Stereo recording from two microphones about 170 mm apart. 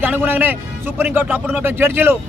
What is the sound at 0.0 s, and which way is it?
Speech, 10° right (ahead or behind).